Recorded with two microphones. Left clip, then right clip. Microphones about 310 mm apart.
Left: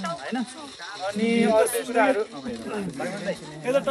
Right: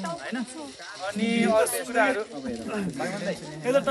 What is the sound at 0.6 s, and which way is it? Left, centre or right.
Snake, centre.